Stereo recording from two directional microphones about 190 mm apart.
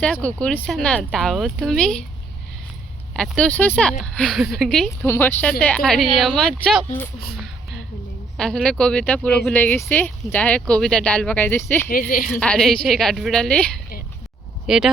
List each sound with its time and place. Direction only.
0.0 s speech: 5° left (ahead or behind)
3.2 s speech: 5° left (ahead or behind)
5.0 s speech: 10° left (ahead or behind)
7.3 s a sound: centre (ahead or behind)
8.4 s speech: 5° left (ahead or behind)
11.9 s a woman's voice: 50° left (ahead or behind)
12.4 s speech: 5° left (ahead or behind)